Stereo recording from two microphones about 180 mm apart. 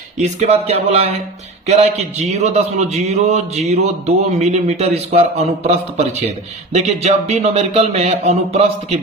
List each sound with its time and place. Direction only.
0.2 s a man's voice: 40° right (ahead or behind)